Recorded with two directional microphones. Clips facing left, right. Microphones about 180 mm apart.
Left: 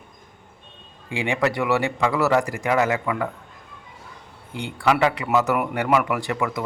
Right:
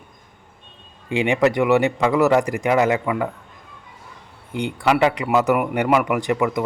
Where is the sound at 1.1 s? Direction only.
20° right (ahead or behind).